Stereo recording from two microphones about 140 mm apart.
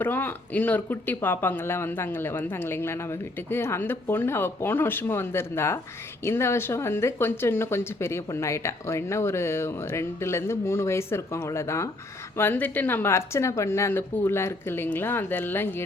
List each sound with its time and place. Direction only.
0.0 s speech: 15° left (ahead or behind)